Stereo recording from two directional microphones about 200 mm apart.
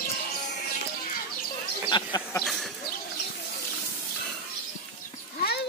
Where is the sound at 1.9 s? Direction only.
20° left (ahead or behind).